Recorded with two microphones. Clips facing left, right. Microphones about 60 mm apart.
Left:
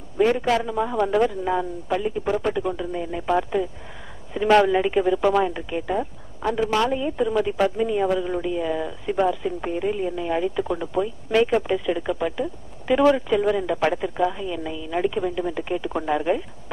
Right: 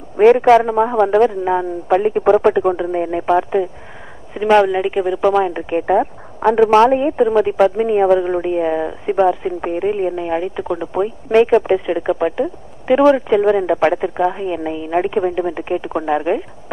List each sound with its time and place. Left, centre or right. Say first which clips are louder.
0.2 s a man's voice: right 11 dB; right
0.6 s speech: right 9 dB; right
2.0 s speech: right 12 dB; right
4.3 s speech: right 4 dB; centre
5.7 s speech: right 10 dB; right; by 11.0 s centre
11.0 s speech: right 7 dB; right